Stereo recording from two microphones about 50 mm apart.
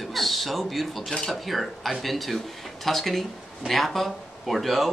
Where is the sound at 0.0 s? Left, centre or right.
Centre.